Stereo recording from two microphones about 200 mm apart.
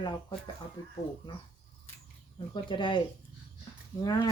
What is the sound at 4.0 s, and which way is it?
Speech, 20° left (ahead or behind).